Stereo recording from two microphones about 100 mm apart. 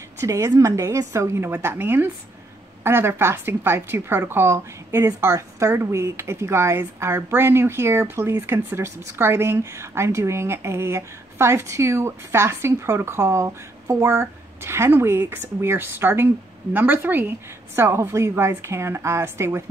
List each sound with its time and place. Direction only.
0.2 s a woman's voice: 30° right (ahead or behind)